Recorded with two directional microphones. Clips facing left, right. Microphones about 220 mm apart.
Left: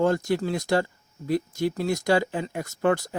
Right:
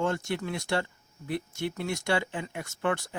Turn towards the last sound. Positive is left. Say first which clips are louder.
# left 6 dB
turn(degrees=35)  # may be behind; listen again after turning